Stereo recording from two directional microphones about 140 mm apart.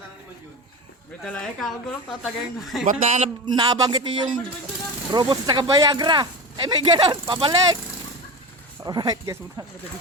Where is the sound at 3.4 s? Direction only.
30° right (ahead or behind).